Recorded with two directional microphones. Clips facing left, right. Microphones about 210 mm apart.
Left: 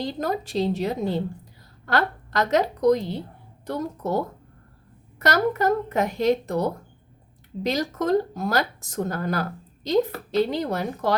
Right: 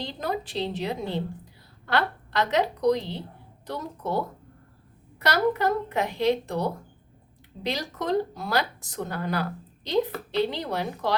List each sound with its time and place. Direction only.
0.0 s speech: 45° left (ahead or behind)
5.2 s speech: 45° left (ahead or behind)